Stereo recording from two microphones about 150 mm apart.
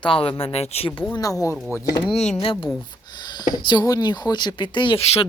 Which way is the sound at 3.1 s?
30° left (ahead or behind).